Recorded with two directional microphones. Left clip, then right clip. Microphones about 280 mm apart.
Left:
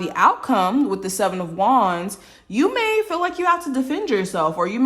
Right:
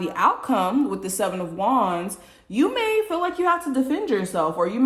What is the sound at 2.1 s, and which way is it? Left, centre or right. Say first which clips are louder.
Speech: left 2 dB; centre.